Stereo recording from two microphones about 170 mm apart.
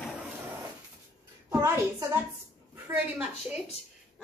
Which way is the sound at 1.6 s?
15° right (ahead or behind).